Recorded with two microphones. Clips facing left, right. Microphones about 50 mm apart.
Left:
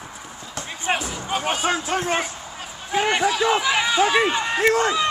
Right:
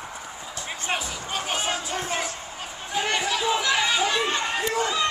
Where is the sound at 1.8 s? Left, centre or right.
Left.